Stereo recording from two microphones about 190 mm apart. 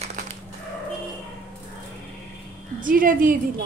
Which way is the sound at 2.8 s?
45° right (ahead or behind).